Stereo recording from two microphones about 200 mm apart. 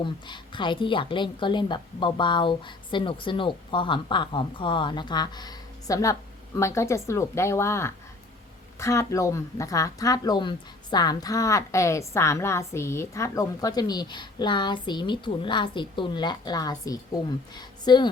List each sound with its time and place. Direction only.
0.0 s a woman's voice: 25° left (ahead or behind)